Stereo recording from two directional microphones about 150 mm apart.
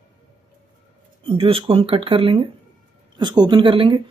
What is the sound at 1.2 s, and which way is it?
A woman's voice, 40° right (ahead or behind).